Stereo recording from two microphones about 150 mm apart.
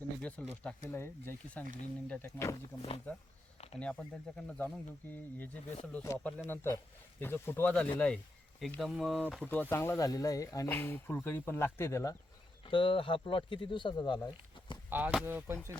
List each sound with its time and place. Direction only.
0.2 s speech: 10° left (ahead or behind)
3.8 s speech: 5° left (ahead or behind)
9.4 s speech: 10° left (ahead or behind)
12.6 s speech: 35° left (ahead or behind)
14.8 s speech: 10° right (ahead or behind)